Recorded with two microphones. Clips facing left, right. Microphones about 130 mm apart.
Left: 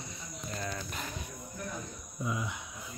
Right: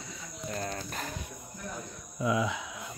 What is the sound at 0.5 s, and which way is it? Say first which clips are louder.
Speech: right 3 dB; 45° right (ahead or behind).